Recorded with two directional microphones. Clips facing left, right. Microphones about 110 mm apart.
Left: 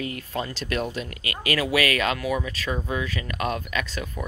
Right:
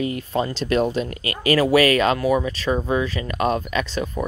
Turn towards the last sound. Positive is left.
turn(degrees=-30)  # may be behind; listen again after turning